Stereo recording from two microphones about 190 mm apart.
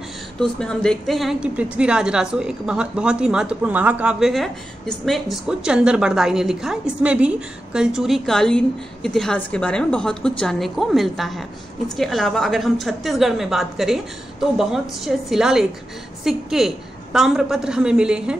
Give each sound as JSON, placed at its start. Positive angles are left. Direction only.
{"t": 0.4, "sound": "a woman's voice", "side_deg": 5}